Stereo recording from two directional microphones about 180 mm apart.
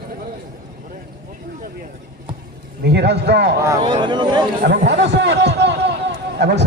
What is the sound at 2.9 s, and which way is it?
Speech, 65° right (ahead or behind).